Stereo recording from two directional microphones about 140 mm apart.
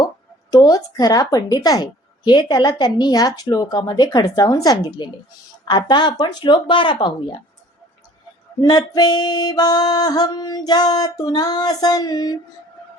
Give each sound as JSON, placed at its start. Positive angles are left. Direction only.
{"t": 0.5, "sound": "a woman's voice", "side_deg": 25}
{"t": 8.6, "sound": "a woman's voice", "side_deg": 30}